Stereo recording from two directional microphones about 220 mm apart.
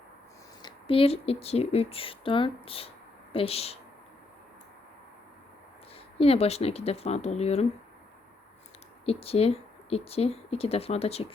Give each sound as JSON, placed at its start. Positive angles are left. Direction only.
{"t": 0.6, "sound": "speech", "side_deg": 25}
{"t": 6.1, "sound": "speech", "side_deg": 25}
{"t": 9.0, "sound": "speech", "side_deg": 25}